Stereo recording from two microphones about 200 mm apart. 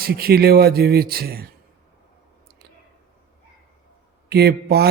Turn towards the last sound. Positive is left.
turn(degrees=-55)  # may be behind; listen again after turning